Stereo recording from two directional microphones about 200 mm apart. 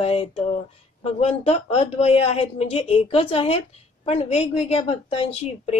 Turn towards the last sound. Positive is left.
turn(degrees=30)  # may be behind; listen again after turning